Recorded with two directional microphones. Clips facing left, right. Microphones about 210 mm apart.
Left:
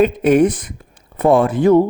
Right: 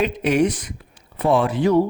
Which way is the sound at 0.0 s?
50° left (ahead or behind).